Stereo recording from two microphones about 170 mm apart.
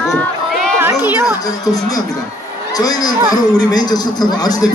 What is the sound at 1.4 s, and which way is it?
Speech, 20° left (ahead or behind).